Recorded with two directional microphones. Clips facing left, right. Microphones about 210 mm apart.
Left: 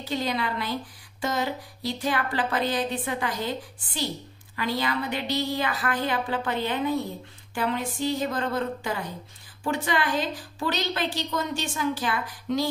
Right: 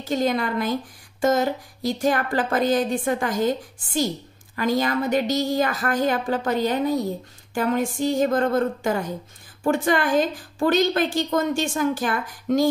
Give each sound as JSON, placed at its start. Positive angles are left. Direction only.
{"t": 0.0, "sound": "speech", "side_deg": -45}